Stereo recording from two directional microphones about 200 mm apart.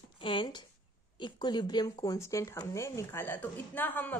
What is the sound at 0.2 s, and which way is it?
A woman's voice, 25° left (ahead or behind).